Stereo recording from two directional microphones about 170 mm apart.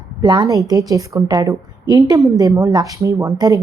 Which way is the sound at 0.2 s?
25° right (ahead or behind).